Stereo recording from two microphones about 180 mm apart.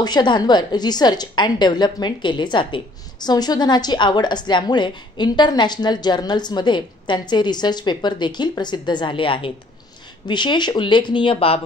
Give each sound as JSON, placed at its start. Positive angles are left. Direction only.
{"t": 0.0, "sound": "a woman's voice", "side_deg": 25}